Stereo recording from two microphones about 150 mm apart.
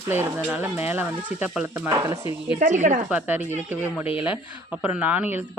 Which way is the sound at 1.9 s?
30° right (ahead or behind).